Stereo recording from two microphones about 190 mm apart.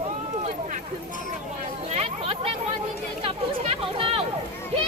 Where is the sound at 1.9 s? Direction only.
35° right (ahead or behind).